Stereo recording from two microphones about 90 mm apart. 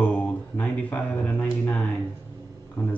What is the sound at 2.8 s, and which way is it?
Speech, 25° left (ahead or behind).